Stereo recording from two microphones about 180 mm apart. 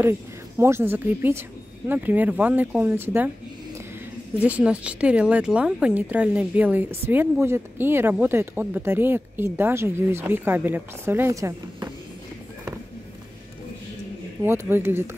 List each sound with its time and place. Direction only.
0.6 s speech: 15° right (ahead or behind)
4.4 s speech: 10° right (ahead or behind)
14.4 s speech: 15° right (ahead or behind)